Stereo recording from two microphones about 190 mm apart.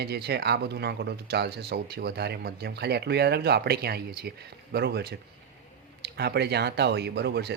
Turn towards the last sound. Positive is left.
turn(degrees=-60)  # may be behind; listen again after turning